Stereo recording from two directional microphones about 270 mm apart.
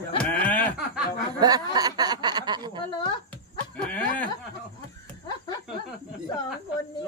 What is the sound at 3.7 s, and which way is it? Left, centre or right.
Snicker, centre.